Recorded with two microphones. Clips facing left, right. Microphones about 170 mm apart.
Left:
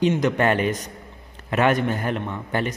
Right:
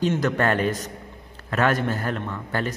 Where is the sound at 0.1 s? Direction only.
10° left (ahead or behind).